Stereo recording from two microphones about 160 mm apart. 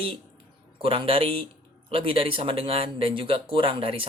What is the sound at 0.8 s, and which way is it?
Speech, 35° right (ahead or behind).